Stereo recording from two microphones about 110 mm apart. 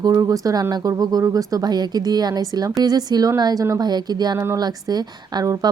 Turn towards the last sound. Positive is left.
turn(degrees=-35)  # may be behind; listen again after turning